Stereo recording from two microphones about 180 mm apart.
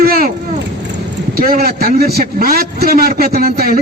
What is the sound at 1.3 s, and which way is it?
A man's voice, 55° right (ahead or behind).